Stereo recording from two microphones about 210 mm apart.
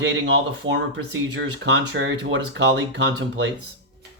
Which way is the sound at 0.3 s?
60° right (ahead or behind).